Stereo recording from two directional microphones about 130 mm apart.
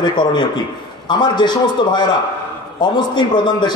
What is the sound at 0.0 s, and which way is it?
A man's voice, 35° left (ahead or behind).